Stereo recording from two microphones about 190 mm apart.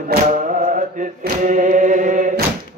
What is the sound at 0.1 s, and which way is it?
Chant, 45° right (ahead or behind).